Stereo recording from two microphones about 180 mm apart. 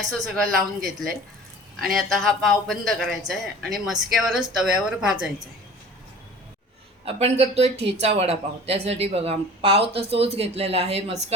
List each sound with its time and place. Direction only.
0.0 s speech: centre (ahead or behind)
7.0 s speech: 35° right (ahead or behind)